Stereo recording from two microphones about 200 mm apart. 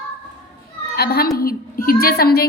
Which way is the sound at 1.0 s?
50° left (ahead or behind).